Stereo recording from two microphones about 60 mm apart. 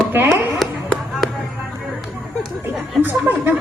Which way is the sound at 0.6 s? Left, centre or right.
Centre.